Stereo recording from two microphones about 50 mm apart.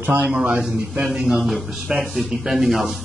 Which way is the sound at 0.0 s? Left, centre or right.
Right.